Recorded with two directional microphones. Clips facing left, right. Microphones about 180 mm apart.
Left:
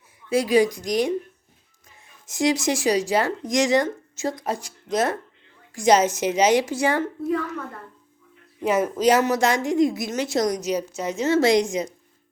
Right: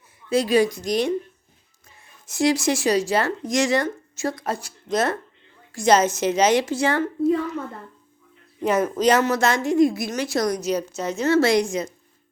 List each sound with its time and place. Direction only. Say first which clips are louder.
0.3 s a woman's voice: even; 10° left (ahead or behind)
2.2 s a woman's voice: right 1 dB; 20° left (ahead or behind)
8.6 s a woman's voice: even; 10° left (ahead or behind)